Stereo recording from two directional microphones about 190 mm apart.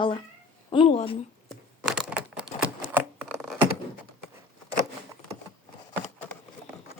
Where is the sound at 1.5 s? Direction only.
Centre (ahead or behind).